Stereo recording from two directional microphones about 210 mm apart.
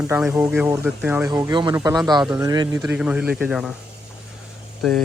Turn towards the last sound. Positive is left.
turn(degrees=0)  # may be behind; listen again after turning